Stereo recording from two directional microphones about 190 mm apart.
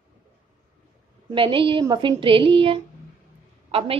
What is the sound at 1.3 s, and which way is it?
A woman's voice, 25° right (ahead or behind).